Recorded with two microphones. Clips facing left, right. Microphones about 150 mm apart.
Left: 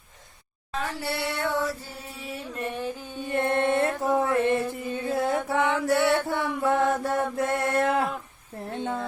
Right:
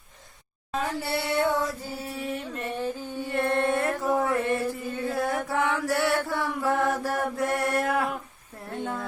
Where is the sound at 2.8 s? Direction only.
15° left (ahead or behind).